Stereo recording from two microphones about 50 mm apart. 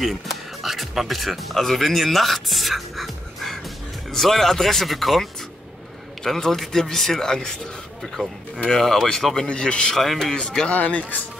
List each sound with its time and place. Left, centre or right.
0.0 s speech: centre
8.6 s speech: centre
9.9 s speech: centre
10.3 s speech: centre
10.7 s speech: left